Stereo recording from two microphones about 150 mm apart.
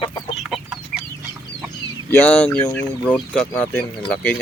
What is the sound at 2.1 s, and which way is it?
Speech, 10° left (ahead or behind).